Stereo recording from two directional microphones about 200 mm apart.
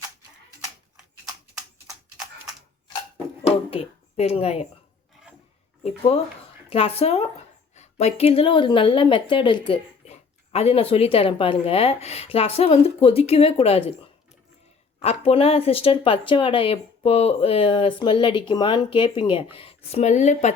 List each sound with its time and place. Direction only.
3.4 s a sound: 30° left (ahead or behind)
5.8 s speech: 30° left (ahead or behind)
14.9 s speech: 30° left (ahead or behind)